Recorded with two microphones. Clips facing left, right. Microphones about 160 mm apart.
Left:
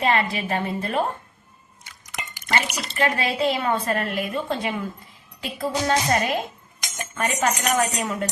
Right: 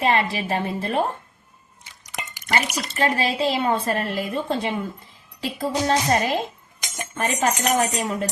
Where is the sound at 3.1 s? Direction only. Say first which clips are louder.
Right 1 dB; 30° right (ahead or behind).